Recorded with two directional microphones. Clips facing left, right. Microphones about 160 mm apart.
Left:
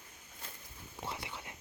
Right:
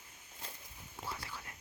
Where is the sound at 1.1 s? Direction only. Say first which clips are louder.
Left 2 dB; 20° left (ahead or behind).